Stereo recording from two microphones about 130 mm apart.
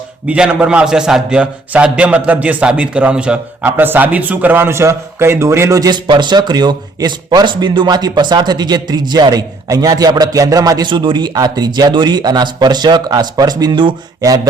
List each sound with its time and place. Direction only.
0.3 s a man's voice: 10° right (ahead or behind); by 14.3 s 35° right (ahead or behind)